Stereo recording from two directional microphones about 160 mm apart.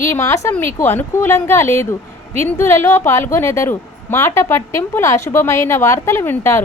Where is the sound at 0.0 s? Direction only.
15° left (ahead or behind).